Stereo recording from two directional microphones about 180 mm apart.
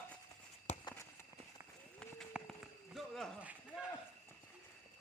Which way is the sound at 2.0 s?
Centre (ahead or behind).